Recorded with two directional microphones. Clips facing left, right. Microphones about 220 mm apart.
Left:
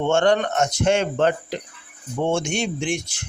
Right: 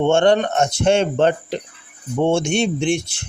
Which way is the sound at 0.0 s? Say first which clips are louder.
Right 4 dB; 25° right (ahead or behind).